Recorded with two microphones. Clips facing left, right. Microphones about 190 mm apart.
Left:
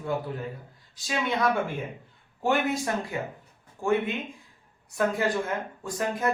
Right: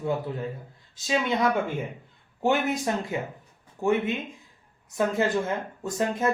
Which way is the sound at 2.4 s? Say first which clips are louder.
Right 1 dB; 20° right (ahead or behind).